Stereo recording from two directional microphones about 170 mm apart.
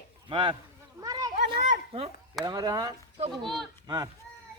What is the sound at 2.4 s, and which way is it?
Speech, 20° right (ahead or behind).